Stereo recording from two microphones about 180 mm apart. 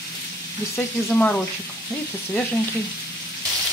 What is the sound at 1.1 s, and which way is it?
Frying, 5° left (ahead or behind).